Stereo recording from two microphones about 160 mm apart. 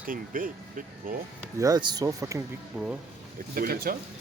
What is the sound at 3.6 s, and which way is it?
Speech, 65° right (ahead or behind).